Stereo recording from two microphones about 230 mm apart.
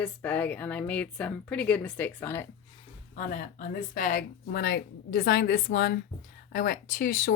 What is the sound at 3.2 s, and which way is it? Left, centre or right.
Speech, left.